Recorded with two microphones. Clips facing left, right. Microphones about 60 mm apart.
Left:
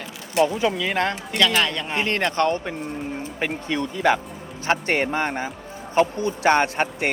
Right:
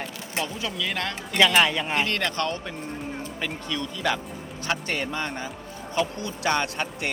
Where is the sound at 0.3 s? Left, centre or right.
Left.